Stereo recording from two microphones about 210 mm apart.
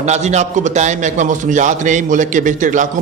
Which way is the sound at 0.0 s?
30° right (ahead or behind).